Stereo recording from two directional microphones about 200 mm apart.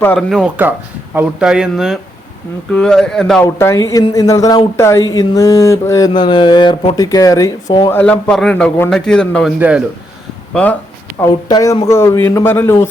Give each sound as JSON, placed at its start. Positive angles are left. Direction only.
{"t": 0.0, "sound": "a man's voice", "side_deg": 5}
{"t": 3.4, "sound": "speech", "side_deg": 15}
{"t": 7.9, "sound": "a man's voice", "side_deg": 5}
{"t": 9.6, "sound": "a man's voice", "side_deg": -5}
{"t": 10.5, "sound": "speech", "side_deg": 5}
{"t": 11.2, "sound": "speech", "side_deg": 15}